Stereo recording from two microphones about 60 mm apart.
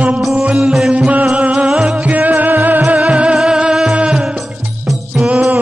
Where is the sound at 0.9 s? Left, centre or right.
Right.